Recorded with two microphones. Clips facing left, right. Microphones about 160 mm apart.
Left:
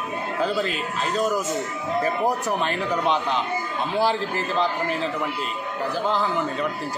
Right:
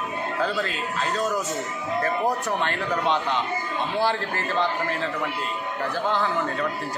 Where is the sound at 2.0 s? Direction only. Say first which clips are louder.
Left 1 dB; 10° left (ahead or behind).